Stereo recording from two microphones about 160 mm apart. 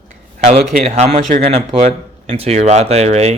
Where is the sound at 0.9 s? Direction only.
45° right (ahead or behind).